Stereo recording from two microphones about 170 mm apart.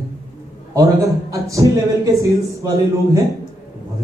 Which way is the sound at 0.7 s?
20° right (ahead or behind).